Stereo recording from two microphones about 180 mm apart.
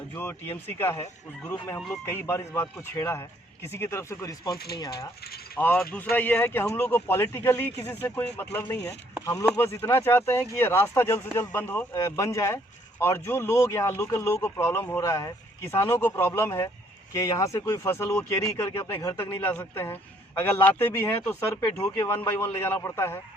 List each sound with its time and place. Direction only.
0.1 s speech: 10° left (ahead or behind)
4.5 s speech: 60° left (ahead or behind)
5.5 s speech: 10° left (ahead or behind)